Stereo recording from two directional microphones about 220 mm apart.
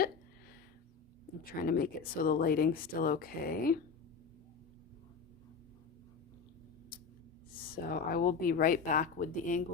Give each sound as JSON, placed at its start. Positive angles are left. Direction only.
{"t": 1.5, "sound": "speech", "side_deg": 40}
{"t": 7.9, "sound": "speech", "side_deg": 40}